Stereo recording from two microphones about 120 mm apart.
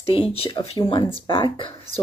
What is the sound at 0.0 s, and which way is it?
Speech, 50° left (ahead or behind).